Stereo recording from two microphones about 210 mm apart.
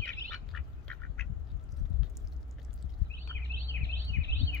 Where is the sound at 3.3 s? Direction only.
15° left (ahead or behind).